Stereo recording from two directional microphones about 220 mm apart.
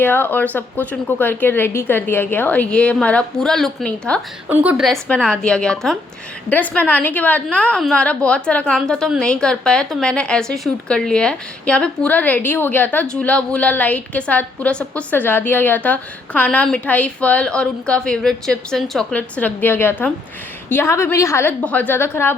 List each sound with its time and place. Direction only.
0.0 s a woman's voice: 10° left (ahead or behind)
4.4 s a woman's voice: 5° right (ahead or behind); by 22.4 s 10° left (ahead or behind)